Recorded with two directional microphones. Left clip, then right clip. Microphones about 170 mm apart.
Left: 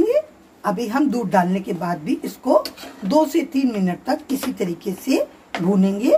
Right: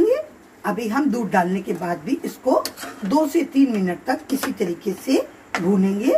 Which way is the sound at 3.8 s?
85° left.